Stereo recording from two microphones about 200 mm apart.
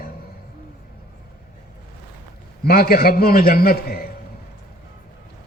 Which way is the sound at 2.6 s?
50° left (ahead or behind).